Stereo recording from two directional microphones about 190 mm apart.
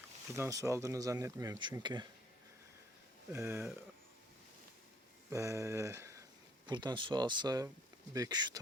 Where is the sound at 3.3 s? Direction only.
10° right (ahead or behind).